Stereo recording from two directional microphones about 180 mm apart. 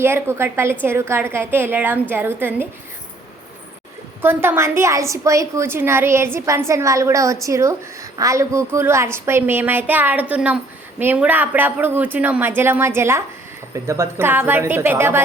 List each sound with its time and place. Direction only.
0.0 s a woman's voice: 15° right (ahead or behind)
4.2 s a woman's voice: 10° right (ahead or behind)